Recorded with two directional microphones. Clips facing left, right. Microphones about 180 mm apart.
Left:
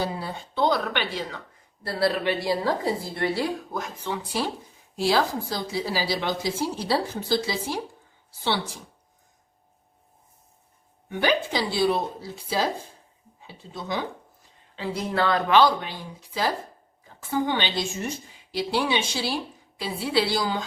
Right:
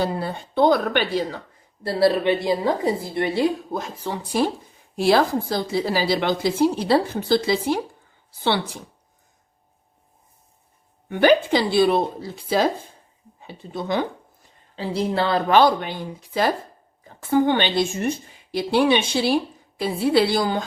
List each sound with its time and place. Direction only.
0.0 s speech: 55° right (ahead or behind); by 1.4 s 40° right (ahead or behind)
1.8 s a woman's voice: 25° right (ahead or behind); by 4.4 s 45° right (ahead or behind)
4.9 s a woman's voice: 55° right (ahead or behind)
11.1 s a woman's voice: 60° right (ahead or behind)
13.4 s speech: 60° right (ahead or behind)
14.8 s speech: 30° right (ahead or behind)
15.5 s a woman's voice: 55° right (ahead or behind)